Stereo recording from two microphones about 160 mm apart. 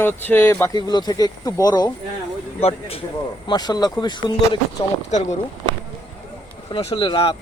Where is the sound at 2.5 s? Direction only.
40° left (ahead or behind).